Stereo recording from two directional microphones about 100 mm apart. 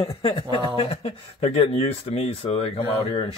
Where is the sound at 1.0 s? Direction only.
85° left.